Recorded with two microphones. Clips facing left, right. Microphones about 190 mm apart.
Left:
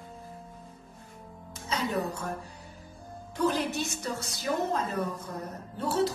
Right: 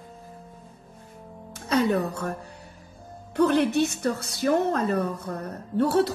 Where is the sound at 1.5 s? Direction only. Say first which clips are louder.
Right 8 dB; 60° right (ahead or behind).